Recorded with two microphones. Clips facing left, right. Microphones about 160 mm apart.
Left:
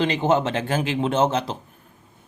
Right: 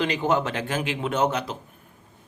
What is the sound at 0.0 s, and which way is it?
Speech, 25° left (ahead or behind).